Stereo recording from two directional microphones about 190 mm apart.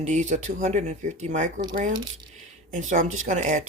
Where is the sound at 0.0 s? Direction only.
40° right (ahead or behind).